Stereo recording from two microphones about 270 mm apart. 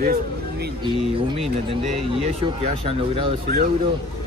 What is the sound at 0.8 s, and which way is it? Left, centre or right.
Speech, centre.